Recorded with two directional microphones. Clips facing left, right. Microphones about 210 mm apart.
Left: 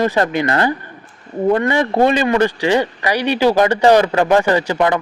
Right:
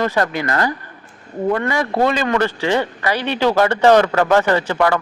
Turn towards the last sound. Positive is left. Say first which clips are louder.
# left 1 dB
turn(degrees=15)  # may be behind; listen again after turning